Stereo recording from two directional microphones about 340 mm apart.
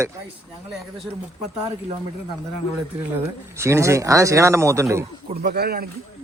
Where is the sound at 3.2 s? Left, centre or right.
Centre.